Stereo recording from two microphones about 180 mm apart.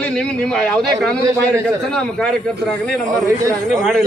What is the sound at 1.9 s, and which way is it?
A man's voice, 5° left (ahead or behind).